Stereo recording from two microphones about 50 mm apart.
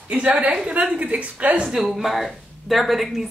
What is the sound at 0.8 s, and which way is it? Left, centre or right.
Speech, right.